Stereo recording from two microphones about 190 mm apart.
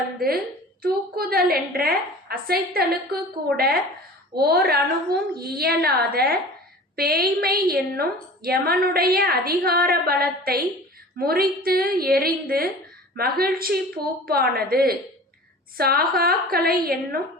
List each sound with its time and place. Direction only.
0.8 s a woman's voice: 50° right (ahead or behind)